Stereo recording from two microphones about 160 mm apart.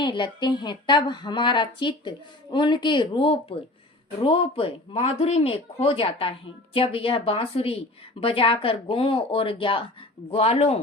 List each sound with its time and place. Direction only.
0.0 s a woman's voice: 30° left (ahead or behind)